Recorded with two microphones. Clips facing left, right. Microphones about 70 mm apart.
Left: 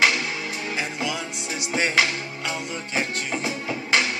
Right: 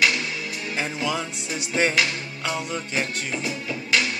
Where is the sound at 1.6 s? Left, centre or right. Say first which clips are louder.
Even; left.